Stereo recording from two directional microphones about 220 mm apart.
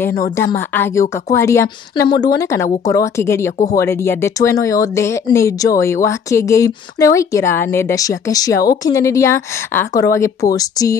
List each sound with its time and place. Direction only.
0.4 s speech: 10° left (ahead or behind)
3.5 s speech: 35° left (ahead or behind)
3.8 s speech: 10° left (ahead or behind)